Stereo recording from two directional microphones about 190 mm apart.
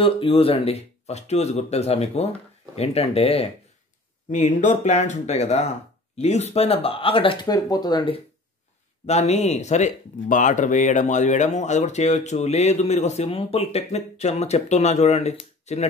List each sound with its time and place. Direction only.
0.0 s speech: 30° left (ahead or behind)
9.0 s speech: 35° left (ahead or behind)